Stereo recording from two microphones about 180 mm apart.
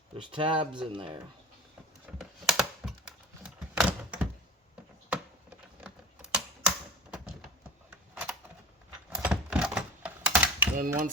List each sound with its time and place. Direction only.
0.2 s speech: 25° right (ahead or behind)
2.1 s computer keyboard: 5° right (ahead or behind)
3.4 s door: 5° right (ahead or behind)
5.0 s typing: 5° right (ahead or behind)
7.9 s typing: 5° right (ahead or behind)
10.8 s speech: 50° right (ahead or behind)